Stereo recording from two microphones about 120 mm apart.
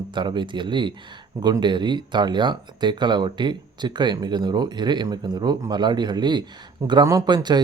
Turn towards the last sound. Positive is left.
turn(degrees=-35)  # may be behind; listen again after turning